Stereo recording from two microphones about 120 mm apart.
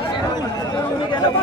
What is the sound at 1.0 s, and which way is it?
Chatter, 40° left (ahead or behind).